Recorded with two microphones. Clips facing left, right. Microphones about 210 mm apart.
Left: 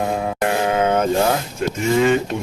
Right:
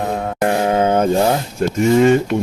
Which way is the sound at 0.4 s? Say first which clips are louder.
Right 3 dB; 35° right (ahead or behind).